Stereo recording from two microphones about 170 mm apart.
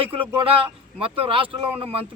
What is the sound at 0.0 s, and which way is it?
Speech, 30° right (ahead or behind).